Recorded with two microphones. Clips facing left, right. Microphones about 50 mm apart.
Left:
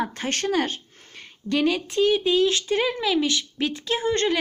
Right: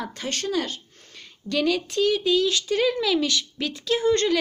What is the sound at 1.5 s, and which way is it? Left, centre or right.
Speech, left.